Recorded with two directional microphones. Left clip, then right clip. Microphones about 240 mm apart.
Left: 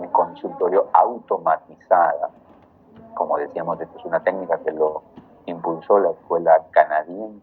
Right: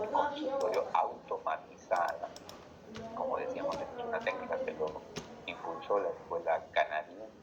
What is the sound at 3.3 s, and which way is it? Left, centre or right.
Speech, left.